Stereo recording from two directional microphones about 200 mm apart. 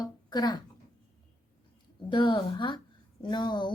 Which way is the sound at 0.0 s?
20° left (ahead or behind).